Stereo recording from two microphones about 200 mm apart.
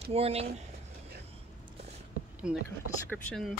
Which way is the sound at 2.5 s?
5° right (ahead or behind).